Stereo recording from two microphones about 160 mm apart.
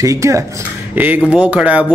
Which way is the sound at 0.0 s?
20° right (ahead or behind).